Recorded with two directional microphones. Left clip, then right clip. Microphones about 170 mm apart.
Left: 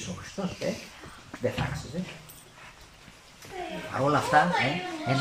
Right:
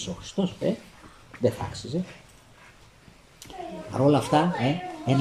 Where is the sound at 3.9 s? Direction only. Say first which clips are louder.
Right 4 dB; 30° right (ahead or behind).